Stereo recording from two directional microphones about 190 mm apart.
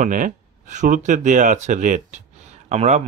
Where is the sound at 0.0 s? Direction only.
45° right (ahead or behind).